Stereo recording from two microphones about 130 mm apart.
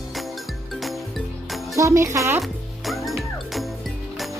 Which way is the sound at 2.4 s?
Centre (ahead or behind).